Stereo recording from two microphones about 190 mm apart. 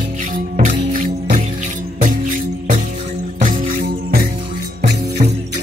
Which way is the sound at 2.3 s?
45° right (ahead or behind).